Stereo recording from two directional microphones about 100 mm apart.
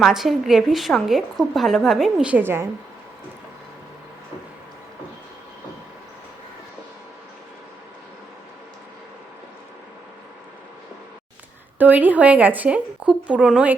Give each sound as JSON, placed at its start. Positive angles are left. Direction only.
{"t": 0.0, "sound": "a woman's voice", "side_deg": -5}
{"t": 2.4, "sound": "a woman's voice", "side_deg": -25}
{"t": 11.8, "sound": "a woman's voice", "side_deg": -15}